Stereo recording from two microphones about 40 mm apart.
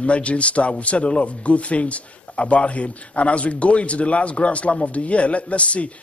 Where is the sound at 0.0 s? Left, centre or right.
Left.